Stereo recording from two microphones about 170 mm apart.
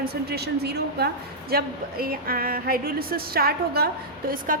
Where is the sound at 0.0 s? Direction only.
65° right (ahead or behind).